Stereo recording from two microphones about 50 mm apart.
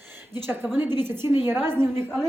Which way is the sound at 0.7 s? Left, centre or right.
Right.